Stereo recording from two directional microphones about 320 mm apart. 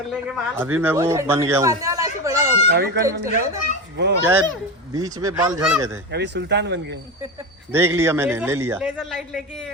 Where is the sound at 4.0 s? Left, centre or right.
Right.